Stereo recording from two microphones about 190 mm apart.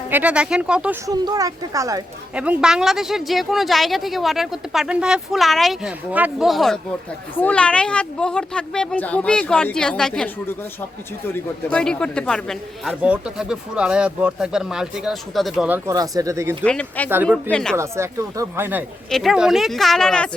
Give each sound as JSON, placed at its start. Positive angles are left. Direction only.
{"t": 0.1, "sound": "speech", "side_deg": -10}
{"t": 1.0, "sound": "speech", "side_deg": -20}
{"t": 2.3, "sound": "speech", "side_deg": -5}
{"t": 15.9, "sound": "speech", "side_deg": -20}
{"t": 16.6, "sound": "speech", "side_deg": 5}
{"t": 17.7, "sound": "speech", "side_deg": -15}